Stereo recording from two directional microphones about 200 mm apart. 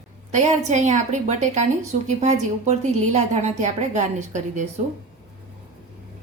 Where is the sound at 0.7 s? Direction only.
35° right (ahead or behind).